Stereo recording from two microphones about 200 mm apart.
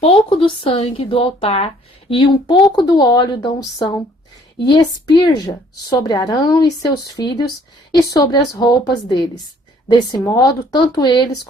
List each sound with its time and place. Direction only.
0.3 s speech: 25° left (ahead or behind)
4.6 s speech: 20° left (ahead or behind)